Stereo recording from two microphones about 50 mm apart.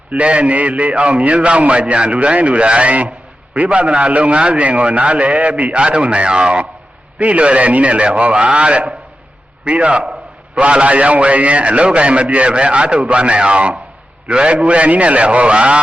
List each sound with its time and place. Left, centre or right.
0.1 s a man's voice: right